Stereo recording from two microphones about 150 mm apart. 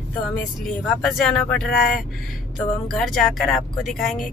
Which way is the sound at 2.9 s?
Centre (ahead or behind).